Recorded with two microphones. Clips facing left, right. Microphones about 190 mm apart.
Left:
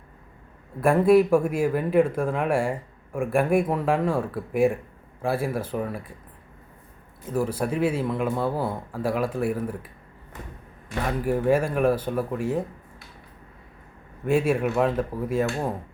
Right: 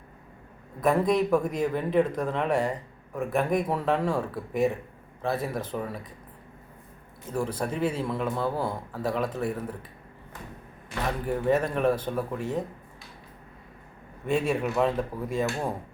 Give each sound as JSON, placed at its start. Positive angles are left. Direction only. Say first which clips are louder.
{"t": 0.8, "sound": "speech", "louder": "left 6 dB", "side_deg": 10}
{"t": 7.3, "sound": "speech", "louder": "left 4 dB", "side_deg": 5}
{"t": 11.2, "sound": "speech", "louder": "left 3 dB", "side_deg": 5}
{"t": 14.3, "sound": "speech", "louder": "left 4 dB", "side_deg": 5}